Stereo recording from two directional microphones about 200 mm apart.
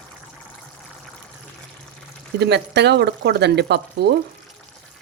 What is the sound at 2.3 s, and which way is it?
Speech, 55° right (ahead or behind).